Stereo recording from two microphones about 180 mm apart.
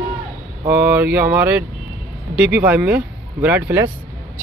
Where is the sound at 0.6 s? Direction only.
10° right (ahead or behind).